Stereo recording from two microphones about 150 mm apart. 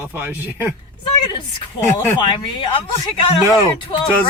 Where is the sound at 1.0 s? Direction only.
30° left (ahead or behind).